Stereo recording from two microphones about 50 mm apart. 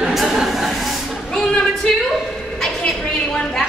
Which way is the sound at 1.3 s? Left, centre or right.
Centre.